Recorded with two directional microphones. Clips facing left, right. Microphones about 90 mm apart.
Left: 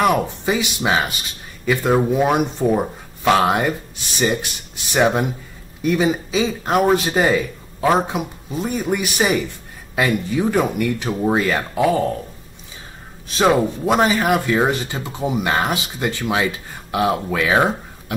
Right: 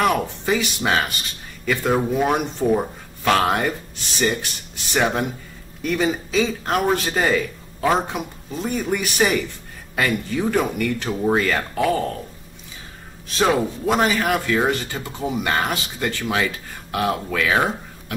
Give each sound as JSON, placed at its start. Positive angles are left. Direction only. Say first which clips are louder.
{"t": 0.0, "sound": "speech", "louder": "left 3 dB", "side_deg": 15}
{"t": 13.4, "sound": "speech", "louder": "left 3 dB", "side_deg": 15}